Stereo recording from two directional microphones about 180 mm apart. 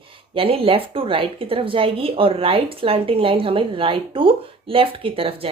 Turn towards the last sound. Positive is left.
turn(degrees=-30)  # may be behind; listen again after turning